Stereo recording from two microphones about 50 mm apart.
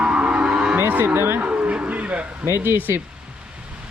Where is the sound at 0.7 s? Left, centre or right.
Right.